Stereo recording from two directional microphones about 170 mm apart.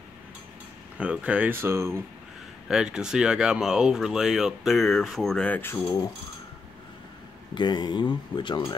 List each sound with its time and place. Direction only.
0.9 s speech: 5° right (ahead or behind)
2.7 s speech: 5° right (ahead or behind); by 6.0 s 15° left (ahead or behind)
7.5 s speech: 25° left (ahead or behind)